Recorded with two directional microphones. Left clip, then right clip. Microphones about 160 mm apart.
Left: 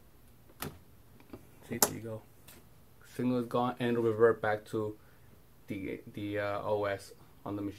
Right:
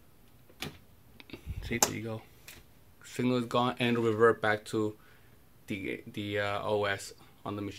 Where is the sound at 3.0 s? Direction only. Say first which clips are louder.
Right 2 dB; 45° right (ahead or behind).